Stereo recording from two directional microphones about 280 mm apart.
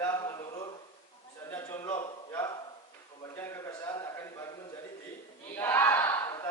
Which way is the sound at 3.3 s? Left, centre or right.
Centre.